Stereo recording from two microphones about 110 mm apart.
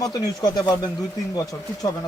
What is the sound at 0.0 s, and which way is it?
Speech, 35° left (ahead or behind).